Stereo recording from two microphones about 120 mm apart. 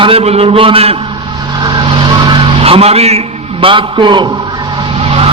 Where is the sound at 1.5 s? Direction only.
35° right (ahead or behind).